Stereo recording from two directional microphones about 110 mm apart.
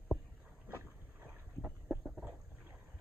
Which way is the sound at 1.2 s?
15° right (ahead or behind).